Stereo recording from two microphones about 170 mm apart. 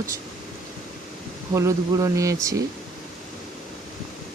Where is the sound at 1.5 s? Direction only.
20° right (ahead or behind).